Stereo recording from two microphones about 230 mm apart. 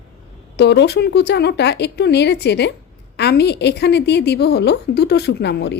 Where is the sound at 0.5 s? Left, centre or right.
Left.